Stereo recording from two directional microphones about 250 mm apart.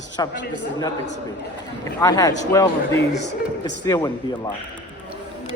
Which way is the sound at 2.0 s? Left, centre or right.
Centre.